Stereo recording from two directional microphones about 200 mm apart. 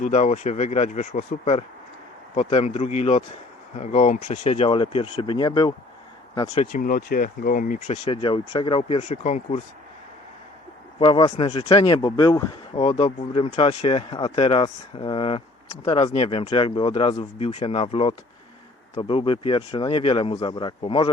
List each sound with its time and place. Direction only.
0.0 s speech: 35° left (ahead or behind)
6.8 s speech: 45° left (ahead or behind)
7.9 s speech: 25° left (ahead or behind)
11.0 s speech: 25° left (ahead or behind)